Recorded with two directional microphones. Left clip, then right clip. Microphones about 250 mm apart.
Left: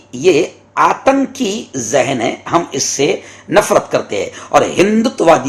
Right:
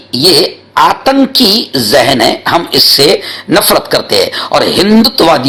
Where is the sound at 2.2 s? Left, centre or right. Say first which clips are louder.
Right 6 dB; right.